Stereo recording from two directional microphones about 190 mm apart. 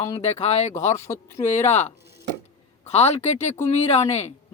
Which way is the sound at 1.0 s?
15° left (ahead or behind).